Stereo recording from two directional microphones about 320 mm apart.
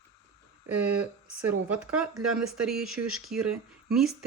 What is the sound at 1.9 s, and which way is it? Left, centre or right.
Speech, centre.